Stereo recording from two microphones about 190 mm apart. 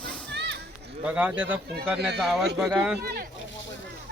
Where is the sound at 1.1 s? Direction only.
10° right (ahead or behind).